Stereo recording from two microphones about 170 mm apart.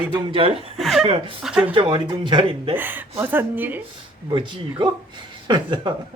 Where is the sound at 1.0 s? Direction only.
35° right (ahead or behind).